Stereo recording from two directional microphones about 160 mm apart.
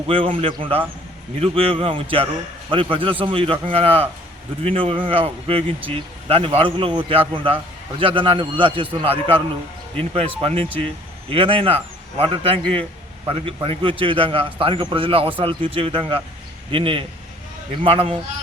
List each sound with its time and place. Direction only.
0.1 s speech: 35° right (ahead or behind)